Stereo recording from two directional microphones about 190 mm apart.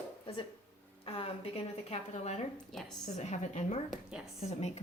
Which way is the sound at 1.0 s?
30° left (ahead or behind).